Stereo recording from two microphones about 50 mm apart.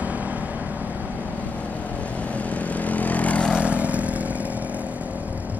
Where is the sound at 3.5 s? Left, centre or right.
Right.